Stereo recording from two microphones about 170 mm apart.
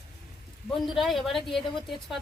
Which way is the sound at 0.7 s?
Centre (ahead or behind).